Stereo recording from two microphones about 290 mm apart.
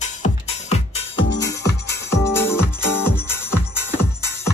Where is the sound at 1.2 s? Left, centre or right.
Left.